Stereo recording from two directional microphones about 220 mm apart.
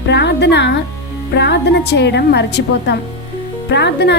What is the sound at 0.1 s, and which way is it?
A woman's voice, 50° left (ahead or behind).